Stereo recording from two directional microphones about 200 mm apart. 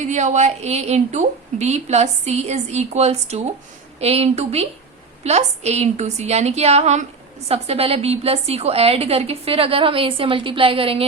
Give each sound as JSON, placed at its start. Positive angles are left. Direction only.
{"t": 0.0, "sound": "a woman's voice", "side_deg": -35}